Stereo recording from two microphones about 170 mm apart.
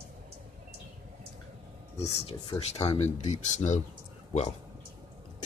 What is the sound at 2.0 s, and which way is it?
Speech, 35° left (ahead or behind).